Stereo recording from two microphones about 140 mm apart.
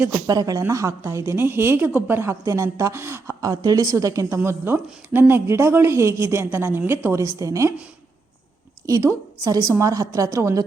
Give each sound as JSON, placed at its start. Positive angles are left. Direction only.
{"t": 0.3, "sound": "a woman's voice", "side_deg": -25}
{"t": 8.9, "sound": "a woman's voice", "side_deg": -25}